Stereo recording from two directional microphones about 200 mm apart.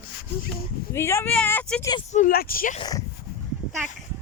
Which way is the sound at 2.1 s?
40° left (ahead or behind).